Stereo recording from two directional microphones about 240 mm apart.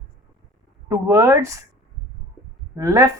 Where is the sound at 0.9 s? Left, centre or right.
Centre.